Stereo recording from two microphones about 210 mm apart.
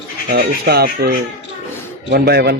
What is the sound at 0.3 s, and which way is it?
Speech, 50° right (ahead or behind).